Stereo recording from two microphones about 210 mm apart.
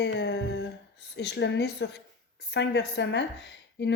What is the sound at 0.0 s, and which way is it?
A woman's voice, 55° left (ahead or behind).